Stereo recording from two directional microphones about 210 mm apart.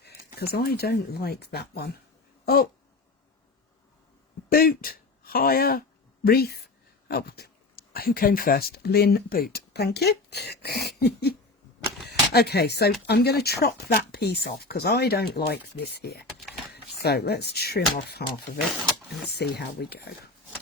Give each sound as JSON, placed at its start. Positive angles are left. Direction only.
{"t": 0.5, "sound": "speech", "side_deg": 50}
{"t": 4.4, "sound": "speech", "side_deg": 45}
{"t": 18.5, "sound": "speech", "side_deg": 35}
{"t": 19.3, "sound": "speech", "side_deg": 50}